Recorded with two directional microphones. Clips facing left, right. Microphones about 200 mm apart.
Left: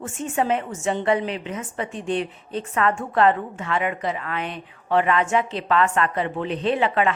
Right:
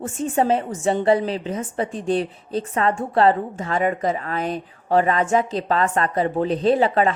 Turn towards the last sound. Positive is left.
turn(degrees=-35)  # may be behind; listen again after turning